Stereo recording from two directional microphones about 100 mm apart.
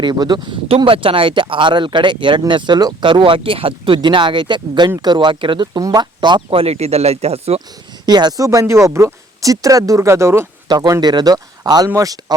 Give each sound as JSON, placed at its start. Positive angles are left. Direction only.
{"t": 0.0, "sound": "speech", "side_deg": -45}
{"t": 0.9, "sound": "speech", "side_deg": -65}
{"t": 5.8, "sound": "speech", "side_deg": -40}
{"t": 6.5, "sound": "speech", "side_deg": -80}
{"t": 8.0, "sound": "speech", "side_deg": -45}